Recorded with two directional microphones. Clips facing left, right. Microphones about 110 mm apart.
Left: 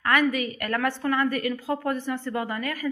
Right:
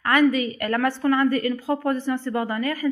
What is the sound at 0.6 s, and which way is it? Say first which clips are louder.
A woman's voice: right 4 dB; 10° right (ahead or behind).